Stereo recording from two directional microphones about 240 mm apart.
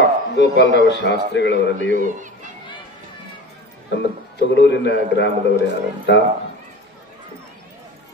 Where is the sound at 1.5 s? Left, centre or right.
Right.